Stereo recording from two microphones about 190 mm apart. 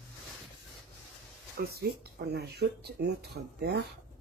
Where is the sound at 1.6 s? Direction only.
55° right (ahead or behind).